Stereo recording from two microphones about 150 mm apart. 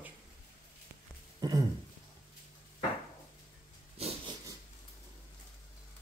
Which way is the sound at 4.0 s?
40° right (ahead or behind).